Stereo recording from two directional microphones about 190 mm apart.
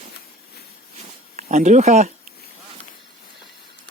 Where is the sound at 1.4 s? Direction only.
40° right (ahead or behind).